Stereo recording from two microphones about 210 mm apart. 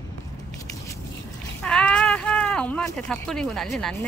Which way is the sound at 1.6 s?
5° left (ahead or behind).